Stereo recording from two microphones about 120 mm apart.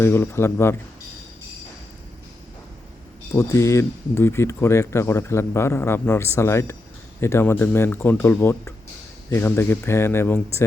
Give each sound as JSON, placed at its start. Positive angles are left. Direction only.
{"t": 0.0, "sound": "speech", "side_deg": 20}
{"t": 3.3, "sound": "speech", "side_deg": 25}